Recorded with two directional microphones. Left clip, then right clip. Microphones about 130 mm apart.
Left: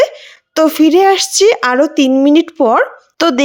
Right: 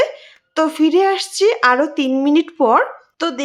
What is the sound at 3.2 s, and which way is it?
Speech, 85° left.